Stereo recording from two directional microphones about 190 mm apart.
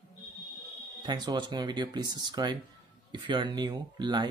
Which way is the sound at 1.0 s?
20° right (ahead or behind).